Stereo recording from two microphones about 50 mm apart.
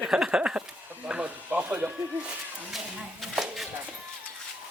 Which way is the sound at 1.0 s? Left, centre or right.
Right.